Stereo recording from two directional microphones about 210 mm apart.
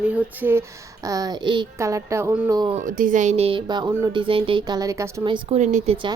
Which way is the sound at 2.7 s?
40° right (ahead or behind).